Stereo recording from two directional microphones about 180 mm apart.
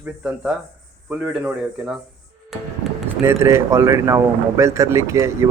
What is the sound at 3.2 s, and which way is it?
A man's voice, 15° right (ahead or behind).